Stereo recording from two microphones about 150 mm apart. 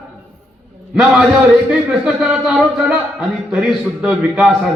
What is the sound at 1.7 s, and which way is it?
A man's voice, 5° right (ahead or behind).